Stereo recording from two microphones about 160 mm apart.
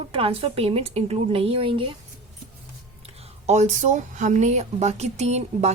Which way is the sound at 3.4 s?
45° right (ahead or behind).